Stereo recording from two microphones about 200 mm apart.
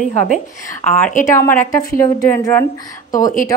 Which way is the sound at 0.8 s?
5° left (ahead or behind).